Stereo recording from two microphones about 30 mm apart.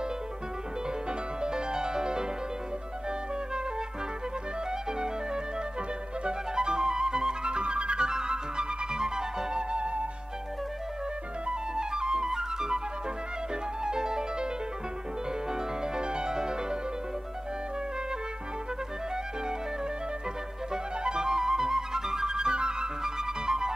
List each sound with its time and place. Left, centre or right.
1.4 s music: right
4.6 s music: right
11.4 s flute: right
13.8 s music: right
15.5 s music: right
20.7 s flute: right